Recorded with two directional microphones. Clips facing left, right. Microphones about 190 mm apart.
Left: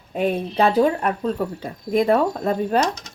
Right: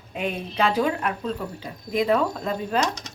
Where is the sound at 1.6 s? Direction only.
50° left (ahead or behind).